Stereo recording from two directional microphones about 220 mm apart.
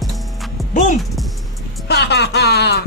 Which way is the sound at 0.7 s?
35° left (ahead or behind).